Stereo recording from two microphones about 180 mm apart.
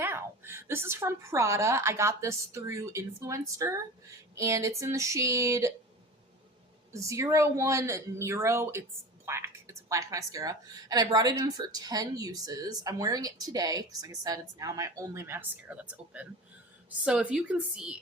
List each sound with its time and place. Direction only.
0.0 s a woman's voice: 15° right (ahead or behind)
6.9 s a woman's voice: 15° right (ahead or behind)